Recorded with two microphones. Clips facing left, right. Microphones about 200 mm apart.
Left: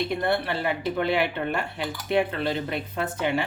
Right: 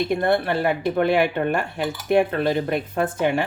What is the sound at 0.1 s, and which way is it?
Speech, 50° right (ahead or behind).